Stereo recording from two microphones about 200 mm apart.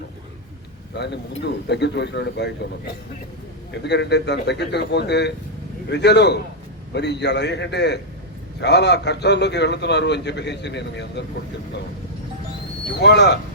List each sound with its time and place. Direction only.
0.9 s a man's voice: 55° left (ahead or behind)
13.0 s a man's voice: 55° left (ahead or behind)